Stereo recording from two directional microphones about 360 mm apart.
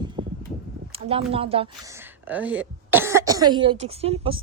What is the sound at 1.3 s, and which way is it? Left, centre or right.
Speech, centre.